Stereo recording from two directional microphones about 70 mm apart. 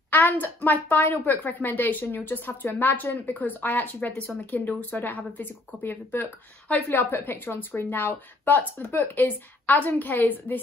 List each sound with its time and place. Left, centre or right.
0.1 s a woman's voice: left